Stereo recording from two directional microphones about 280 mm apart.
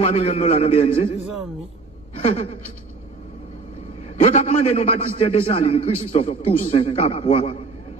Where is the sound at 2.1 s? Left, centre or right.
Left.